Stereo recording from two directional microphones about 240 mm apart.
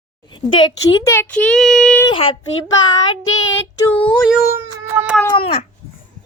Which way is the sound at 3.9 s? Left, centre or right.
Centre.